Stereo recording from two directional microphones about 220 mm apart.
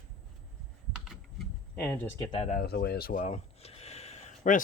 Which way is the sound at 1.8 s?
5° left (ahead or behind).